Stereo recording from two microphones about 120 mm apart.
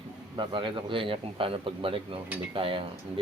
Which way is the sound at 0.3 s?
45° right (ahead or behind).